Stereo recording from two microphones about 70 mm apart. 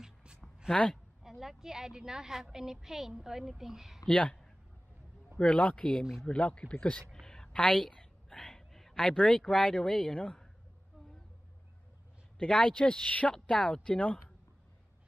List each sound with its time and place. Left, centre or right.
0.0 s a sound: centre
0.7 s a man's voice: centre
1.2 s a woman's voice: centre
4.0 s speech: centre
5.4 s a man's voice: centre
7.2 s a sound: centre
12.4 s a man's voice: centre